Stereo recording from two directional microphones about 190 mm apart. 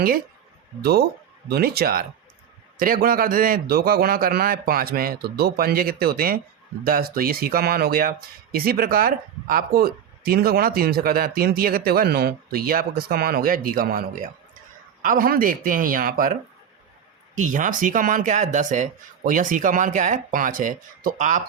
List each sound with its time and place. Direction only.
1.5 s speech: 55° right (ahead or behind)